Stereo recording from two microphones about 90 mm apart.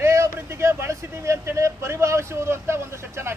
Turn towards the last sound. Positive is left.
turn(degrees=-30)  # may be behind; listen again after turning